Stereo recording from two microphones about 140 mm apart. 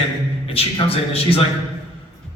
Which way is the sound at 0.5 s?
45° left (ahead or behind).